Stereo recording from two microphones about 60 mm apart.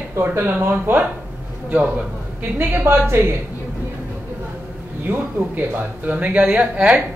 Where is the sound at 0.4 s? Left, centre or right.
Right.